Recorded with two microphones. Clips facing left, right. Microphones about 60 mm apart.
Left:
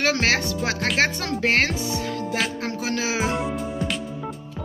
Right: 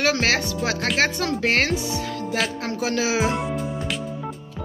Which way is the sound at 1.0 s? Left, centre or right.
Left.